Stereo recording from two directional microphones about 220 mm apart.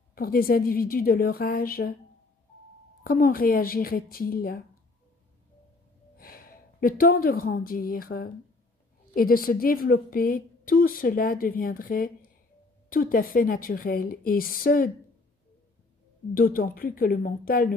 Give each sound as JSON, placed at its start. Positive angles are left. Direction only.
{"t": 0.1, "sound": "a woman's voice", "side_deg": 40}
{"t": 3.0, "sound": "a woman's voice", "side_deg": 40}
{"t": 6.1, "sound": "a woman's voice", "side_deg": 40}
{"t": 16.3, "sound": "a woman's voice", "side_deg": 40}